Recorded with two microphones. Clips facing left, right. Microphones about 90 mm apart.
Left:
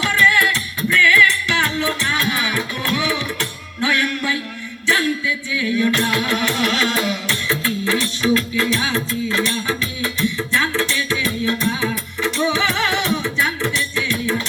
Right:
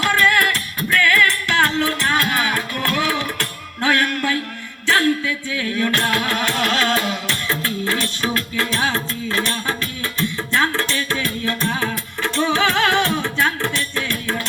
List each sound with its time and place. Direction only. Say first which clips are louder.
0.0 s music: even; 45° right (ahead or behind)